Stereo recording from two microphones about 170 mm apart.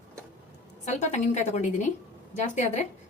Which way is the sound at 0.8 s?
45° left (ahead or behind).